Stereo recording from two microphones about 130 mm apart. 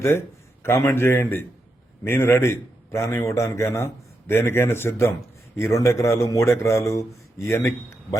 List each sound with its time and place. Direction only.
0.9 s a man's voice: 20° left (ahead or behind)